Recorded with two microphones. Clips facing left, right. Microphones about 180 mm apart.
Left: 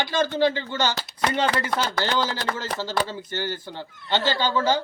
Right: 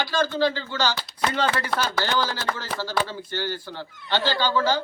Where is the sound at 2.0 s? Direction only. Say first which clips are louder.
Left 1 dB; 20° left (ahead or behind).